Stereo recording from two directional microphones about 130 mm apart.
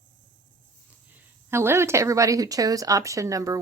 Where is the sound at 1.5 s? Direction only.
20° right (ahead or behind).